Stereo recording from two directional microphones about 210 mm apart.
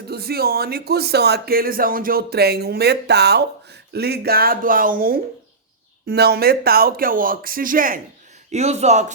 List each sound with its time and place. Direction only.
0.1 s speech: 50° right (ahead or behind); by 9.1 s 35° right (ahead or behind)